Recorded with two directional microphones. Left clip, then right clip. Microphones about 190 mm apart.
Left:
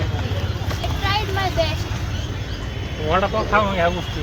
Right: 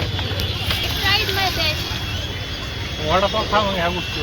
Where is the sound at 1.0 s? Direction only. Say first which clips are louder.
Right 3 dB; 65° left (ahead or behind).